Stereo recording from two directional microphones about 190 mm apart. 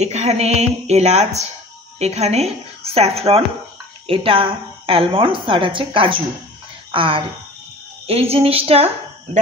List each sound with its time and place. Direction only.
0.0 s a woman's voice: 35° right (ahead or behind)